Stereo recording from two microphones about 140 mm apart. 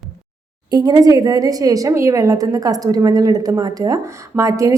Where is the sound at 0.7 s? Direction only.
30° right (ahead or behind).